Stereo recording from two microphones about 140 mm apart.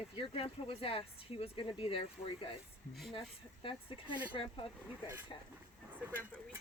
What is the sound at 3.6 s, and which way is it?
Speech, 40° left (ahead or behind).